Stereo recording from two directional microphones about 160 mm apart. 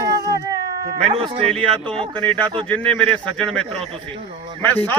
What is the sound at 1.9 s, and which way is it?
Speech, 30° right (ahead or behind).